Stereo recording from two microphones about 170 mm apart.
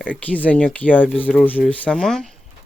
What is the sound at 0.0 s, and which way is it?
Speech, 10° left (ahead or behind).